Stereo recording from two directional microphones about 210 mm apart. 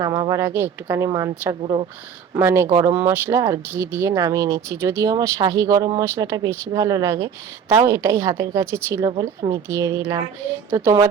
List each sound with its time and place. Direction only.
0.0 s speech: 15° right (ahead or behind)
1.6 s speech: 25° right (ahead or behind)
2.3 s speech: 10° right (ahead or behind)